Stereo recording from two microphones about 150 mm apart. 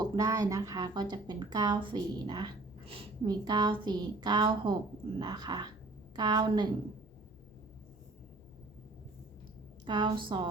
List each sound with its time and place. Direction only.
0.0 s a woman's voice: 25° right (ahead or behind); by 3.1 s 40° right (ahead or behind)
3.2 s a woman's voice: 30° right (ahead or behind)
9.8 s a woman's voice: 30° right (ahead or behind)